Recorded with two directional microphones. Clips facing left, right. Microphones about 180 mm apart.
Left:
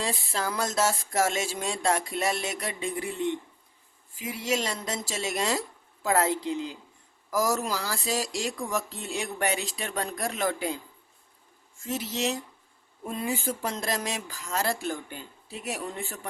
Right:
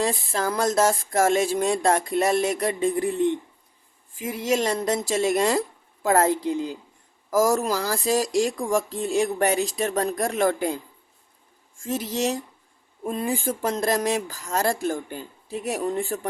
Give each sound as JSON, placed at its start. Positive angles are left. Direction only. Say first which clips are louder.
{"t": 0.0, "sound": "speech", "louder": "right 6 dB", "side_deg": -45}
{"t": 4.2, "sound": "speech", "louder": "right 6 dB", "side_deg": -50}
{"t": 11.9, "sound": "speech", "louder": "right 4 dB", "side_deg": -45}